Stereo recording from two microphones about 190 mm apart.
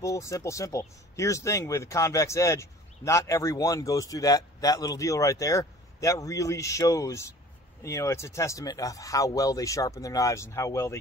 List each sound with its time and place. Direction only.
0.0 s speech: 15° left (ahead or behind)